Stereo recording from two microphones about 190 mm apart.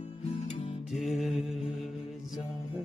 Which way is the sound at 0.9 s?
Centre (ahead or behind).